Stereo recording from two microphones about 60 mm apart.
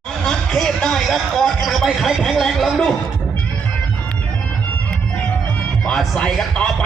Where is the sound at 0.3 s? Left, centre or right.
Centre.